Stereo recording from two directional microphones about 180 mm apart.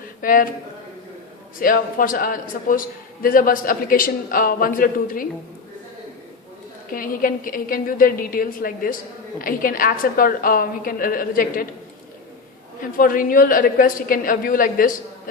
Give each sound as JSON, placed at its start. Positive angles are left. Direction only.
{"t": 0.2, "sound": "a man's voice", "side_deg": 50}
{"t": 1.5, "sound": "a man's voice", "side_deg": 50}
{"t": 6.9, "sound": "a man's voice", "side_deg": 50}
{"t": 12.8, "sound": "a man's voice", "side_deg": 50}